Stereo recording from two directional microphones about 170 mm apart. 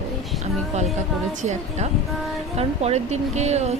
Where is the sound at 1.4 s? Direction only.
45° right (ahead or behind).